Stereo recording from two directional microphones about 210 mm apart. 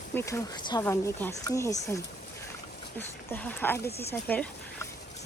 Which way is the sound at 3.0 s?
10° left (ahead or behind).